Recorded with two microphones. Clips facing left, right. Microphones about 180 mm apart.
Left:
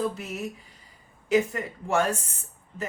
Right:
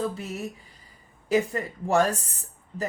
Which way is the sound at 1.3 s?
35° right (ahead or behind).